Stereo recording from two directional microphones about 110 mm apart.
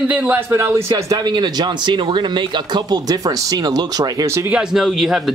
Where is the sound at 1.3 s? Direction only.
40° right (ahead or behind).